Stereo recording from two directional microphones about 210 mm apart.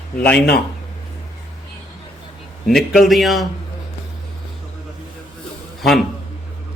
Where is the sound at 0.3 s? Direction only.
50° left (ahead or behind).